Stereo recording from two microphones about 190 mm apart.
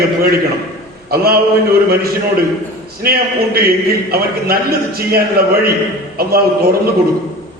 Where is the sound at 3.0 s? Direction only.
55° right (ahead or behind).